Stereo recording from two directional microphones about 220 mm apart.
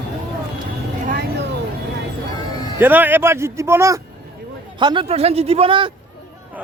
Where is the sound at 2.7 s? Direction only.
10° right (ahead or behind).